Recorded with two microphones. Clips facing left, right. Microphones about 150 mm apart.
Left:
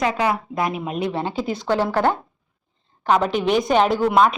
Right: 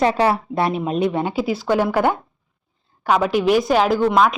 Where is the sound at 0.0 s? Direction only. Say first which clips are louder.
Right 4 dB; 30° right (ahead or behind).